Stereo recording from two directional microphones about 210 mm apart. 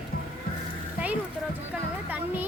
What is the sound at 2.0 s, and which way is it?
Music, 10° right (ahead or behind).